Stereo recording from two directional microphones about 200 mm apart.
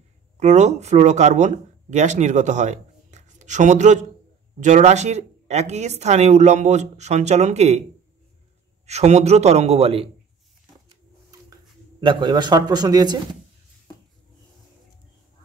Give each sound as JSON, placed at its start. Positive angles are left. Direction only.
{"t": 0.4, "sound": "speech", "side_deg": -35}
{"t": 8.8, "sound": "speech", "side_deg": -35}
{"t": 12.0, "sound": "speech", "side_deg": -25}